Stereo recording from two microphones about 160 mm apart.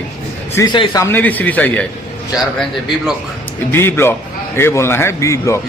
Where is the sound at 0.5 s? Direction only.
25° left (ahead or behind); by 1.9 s 10° left (ahead or behind).